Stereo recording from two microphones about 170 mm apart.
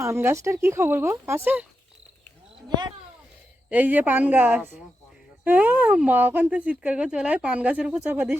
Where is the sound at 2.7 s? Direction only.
25° right (ahead or behind).